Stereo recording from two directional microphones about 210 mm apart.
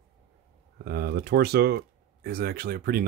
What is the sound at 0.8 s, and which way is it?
Speech, 50° right (ahead or behind).